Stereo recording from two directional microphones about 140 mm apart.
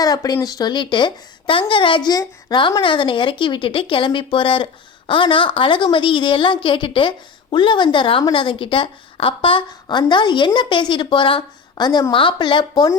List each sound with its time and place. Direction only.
0.0 s a woman's voice: 25° left (ahead or behind)